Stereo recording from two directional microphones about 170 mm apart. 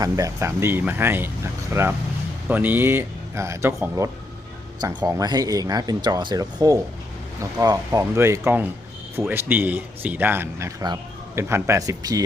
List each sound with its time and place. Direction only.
0.0 s speech: 20° right (ahead or behind)
4.8 s speech: 25° right (ahead or behind)